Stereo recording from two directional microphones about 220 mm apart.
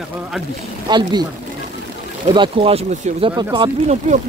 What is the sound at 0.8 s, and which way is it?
Speech, 20° right (ahead or behind).